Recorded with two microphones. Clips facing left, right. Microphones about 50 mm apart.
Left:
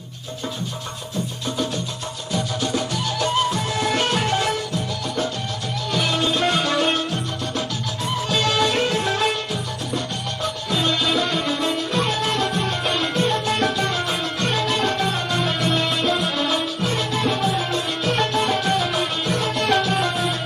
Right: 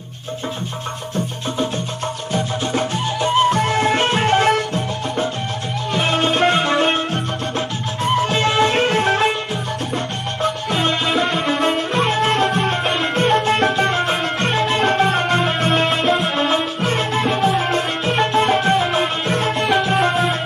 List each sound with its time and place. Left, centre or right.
2.3 s music: right
3.5 s music: right
5.9 s music: right
10.4 s music: right